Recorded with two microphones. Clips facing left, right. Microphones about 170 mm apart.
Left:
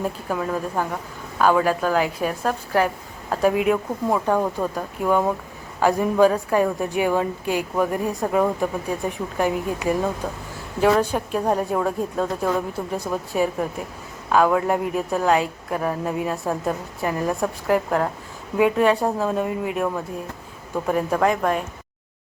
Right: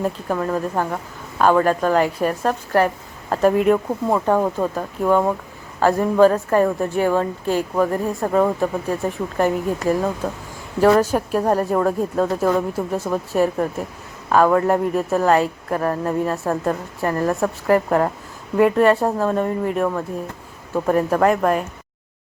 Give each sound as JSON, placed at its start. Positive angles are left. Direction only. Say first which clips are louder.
{"t": 0.3, "sound": "speech", "louder": "right 2 dB", "side_deg": 0}
{"t": 4.3, "sound": "speech", "louder": "right 3 dB", "side_deg": -5}
{"t": 5.8, "sound": "a woman's voice", "louder": "right 3 dB", "side_deg": 10}
{"t": 10.8, "sound": "speech", "louder": "right 4 dB", "side_deg": -5}